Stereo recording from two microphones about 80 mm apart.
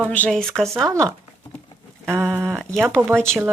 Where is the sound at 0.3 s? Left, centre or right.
Centre.